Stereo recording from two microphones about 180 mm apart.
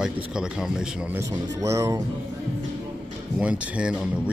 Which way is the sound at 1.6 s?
15° right (ahead or behind).